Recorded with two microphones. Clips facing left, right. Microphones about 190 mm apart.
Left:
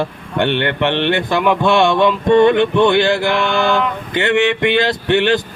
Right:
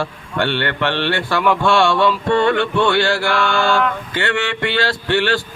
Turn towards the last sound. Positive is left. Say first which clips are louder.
# left 4 dB
turn(degrees=20)  # may be behind; listen again after turning